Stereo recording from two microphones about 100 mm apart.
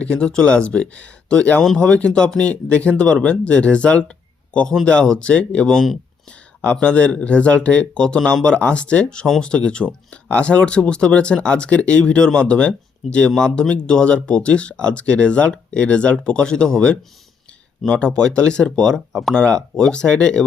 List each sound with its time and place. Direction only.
0.0 s speech: 10° left (ahead or behind)